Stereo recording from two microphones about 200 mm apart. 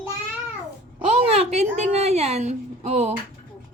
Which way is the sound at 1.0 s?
30° right (ahead or behind).